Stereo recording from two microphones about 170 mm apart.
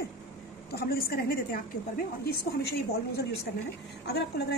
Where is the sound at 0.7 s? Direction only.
60° left (ahead or behind).